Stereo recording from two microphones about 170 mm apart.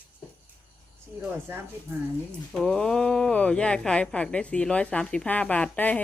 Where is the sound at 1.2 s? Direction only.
15° right (ahead or behind).